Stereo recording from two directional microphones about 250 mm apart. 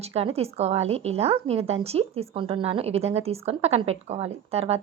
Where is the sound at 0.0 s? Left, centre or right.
Right.